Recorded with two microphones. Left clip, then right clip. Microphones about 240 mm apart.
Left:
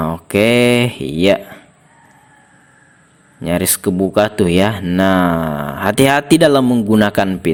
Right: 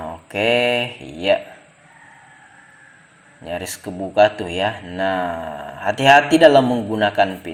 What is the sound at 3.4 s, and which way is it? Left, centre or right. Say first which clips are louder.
Speech: left 10 dB; left.